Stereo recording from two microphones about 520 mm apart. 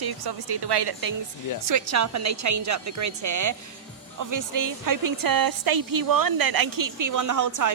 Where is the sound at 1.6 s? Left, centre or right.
Right.